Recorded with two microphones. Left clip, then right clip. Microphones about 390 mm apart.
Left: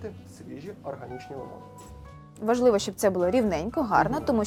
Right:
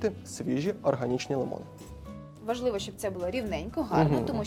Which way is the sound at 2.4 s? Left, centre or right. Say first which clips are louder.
Left 8 dB; left.